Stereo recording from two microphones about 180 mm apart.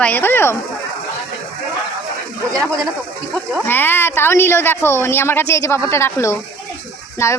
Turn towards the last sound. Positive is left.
turn(degrees=15)  # may be behind; listen again after turning